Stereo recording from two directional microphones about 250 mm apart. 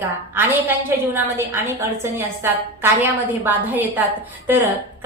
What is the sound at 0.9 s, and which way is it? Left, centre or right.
A woman's voice, centre.